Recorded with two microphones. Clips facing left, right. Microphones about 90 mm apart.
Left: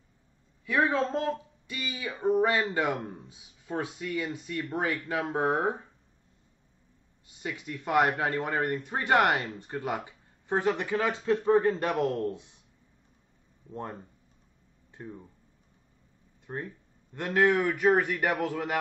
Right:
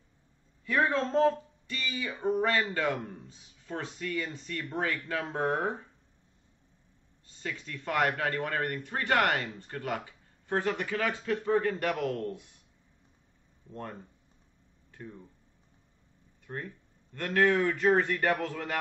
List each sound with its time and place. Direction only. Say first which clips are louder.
0.7 s speech: left 2 dB; 5° left (ahead or behind)
7.2 s speech: left 2 dB; 15° left (ahead or behind)
13.7 s speech: left 3 dB; 20° left (ahead or behind)
16.4 s speech: left 2 dB; 20° left (ahead or behind)